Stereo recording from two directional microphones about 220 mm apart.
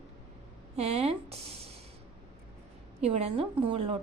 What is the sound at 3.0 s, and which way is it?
A woman's voice, 30° right (ahead or behind).